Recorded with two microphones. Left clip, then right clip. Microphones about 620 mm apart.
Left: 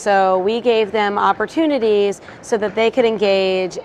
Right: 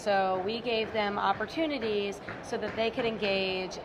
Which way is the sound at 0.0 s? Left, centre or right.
Left.